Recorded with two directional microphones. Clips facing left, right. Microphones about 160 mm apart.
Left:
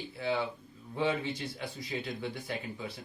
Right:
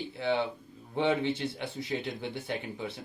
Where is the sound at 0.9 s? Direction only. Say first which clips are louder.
Right 4 dB; 25° right (ahead or behind).